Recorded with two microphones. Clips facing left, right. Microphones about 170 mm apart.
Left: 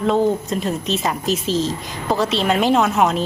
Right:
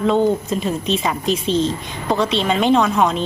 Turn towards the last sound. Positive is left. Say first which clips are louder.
# right 1 dB
turn(degrees=5)  # may be behind; listen again after turning